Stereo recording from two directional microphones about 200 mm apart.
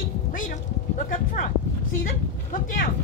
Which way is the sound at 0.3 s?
40° left (ahead or behind).